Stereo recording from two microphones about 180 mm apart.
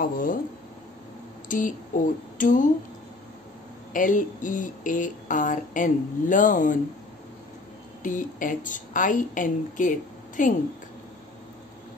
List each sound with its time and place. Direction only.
0.0 s speech: 50° left (ahead or behind)
1.5 s speech: 45° left (ahead or behind)
3.9 s speech: 45° left (ahead or behind)
8.0 s speech: 45° left (ahead or behind)